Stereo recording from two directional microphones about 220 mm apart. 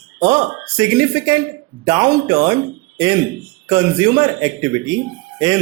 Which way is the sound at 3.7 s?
20° right (ahead or behind).